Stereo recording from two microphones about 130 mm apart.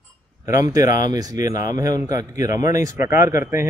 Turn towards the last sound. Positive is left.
turn(degrees=-20)  # may be behind; listen again after turning